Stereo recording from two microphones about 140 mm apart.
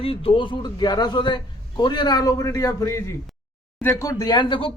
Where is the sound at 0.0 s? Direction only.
40° left (ahead or behind).